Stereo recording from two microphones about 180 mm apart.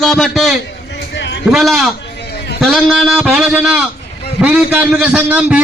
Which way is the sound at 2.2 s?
65° left (ahead or behind).